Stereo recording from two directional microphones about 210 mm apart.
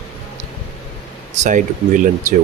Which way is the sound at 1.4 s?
40° right (ahead or behind).